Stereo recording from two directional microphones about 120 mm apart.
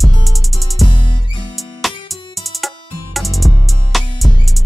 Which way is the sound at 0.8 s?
40° left (ahead or behind).